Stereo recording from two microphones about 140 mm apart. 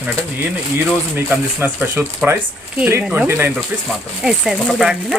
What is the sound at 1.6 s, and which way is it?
Speech, 15° right (ahead or behind).